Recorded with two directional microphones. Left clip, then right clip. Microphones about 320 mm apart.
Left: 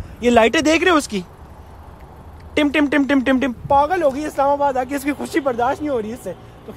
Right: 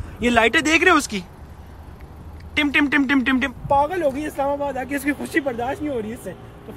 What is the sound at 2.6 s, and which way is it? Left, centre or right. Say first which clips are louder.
Speech: left 2 dB; centre.